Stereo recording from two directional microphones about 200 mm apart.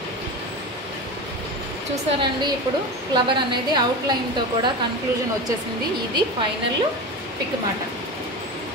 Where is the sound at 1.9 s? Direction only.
25° right (ahead or behind).